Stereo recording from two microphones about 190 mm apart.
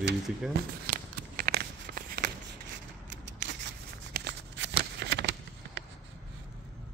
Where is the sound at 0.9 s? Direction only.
50° right (ahead or behind).